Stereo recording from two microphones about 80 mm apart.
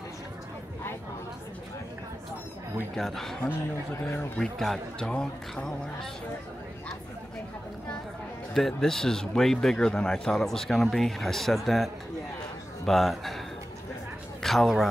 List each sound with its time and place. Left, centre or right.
3.0 s a man's voice: centre
4.0 s speech: left
4.4 s speech: centre
8.5 s a man's voice: centre
14.4 s a man's voice: centre